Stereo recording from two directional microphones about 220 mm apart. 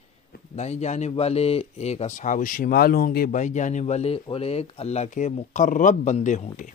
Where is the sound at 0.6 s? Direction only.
30° left (ahead or behind).